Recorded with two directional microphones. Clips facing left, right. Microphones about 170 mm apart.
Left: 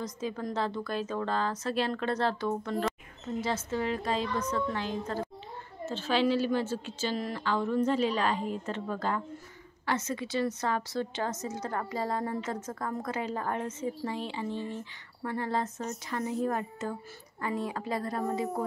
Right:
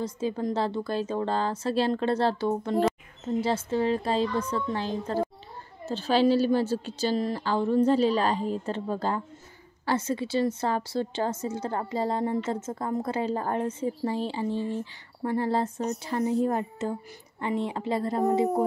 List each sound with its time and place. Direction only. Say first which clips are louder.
0.0 s a woman's voice: right 6 dB; 30° right (ahead or behind)